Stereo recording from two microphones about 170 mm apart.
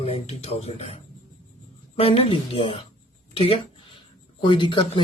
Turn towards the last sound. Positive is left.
turn(degrees=30)  # may be behind; listen again after turning